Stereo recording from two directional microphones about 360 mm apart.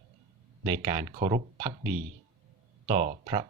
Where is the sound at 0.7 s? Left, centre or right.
Centre.